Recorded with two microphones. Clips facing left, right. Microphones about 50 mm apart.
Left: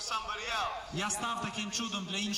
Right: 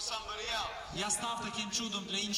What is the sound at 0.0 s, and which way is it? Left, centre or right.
A man's voice, left.